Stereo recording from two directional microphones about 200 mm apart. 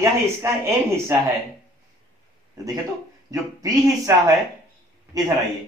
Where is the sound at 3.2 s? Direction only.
15° right (ahead or behind).